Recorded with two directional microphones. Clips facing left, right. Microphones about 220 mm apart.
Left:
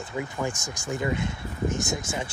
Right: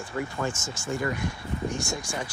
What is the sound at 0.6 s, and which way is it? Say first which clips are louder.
Speech: even; 15° left (ahead or behind).